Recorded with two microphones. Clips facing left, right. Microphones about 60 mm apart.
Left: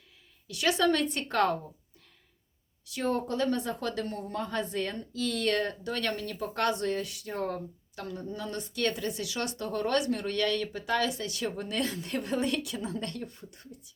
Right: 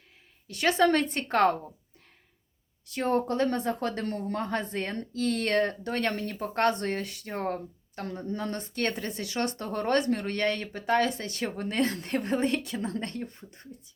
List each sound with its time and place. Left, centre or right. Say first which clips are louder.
0.4 s speech: right 3 dB; right
2.8 s speech: right 3 dB; right